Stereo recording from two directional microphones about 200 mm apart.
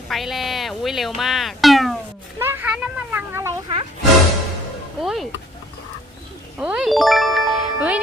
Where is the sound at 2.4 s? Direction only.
10° right (ahead or behind).